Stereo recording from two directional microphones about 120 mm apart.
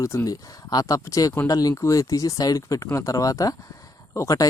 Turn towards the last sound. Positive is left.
turn(degrees=25)  # may be behind; listen again after turning